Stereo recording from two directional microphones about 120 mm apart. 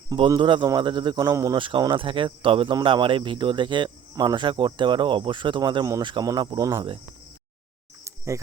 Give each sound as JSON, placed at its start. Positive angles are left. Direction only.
{"t": 0.3, "sound": "speech", "side_deg": -40}
{"t": 1.5, "sound": "speech", "side_deg": -45}
{"t": 8.0, "sound": "insect", "side_deg": -25}